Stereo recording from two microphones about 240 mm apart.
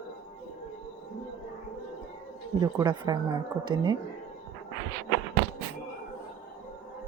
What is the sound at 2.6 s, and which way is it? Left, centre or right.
A woman's voice, centre.